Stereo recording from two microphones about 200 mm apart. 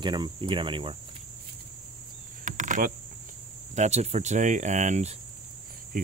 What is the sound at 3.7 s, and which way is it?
Speech, 35° right (ahead or behind).